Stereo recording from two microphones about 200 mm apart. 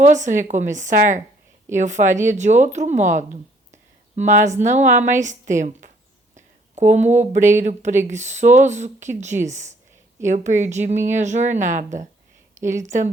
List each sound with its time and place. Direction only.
0.0 s a woman's voice: 35° right (ahead or behind)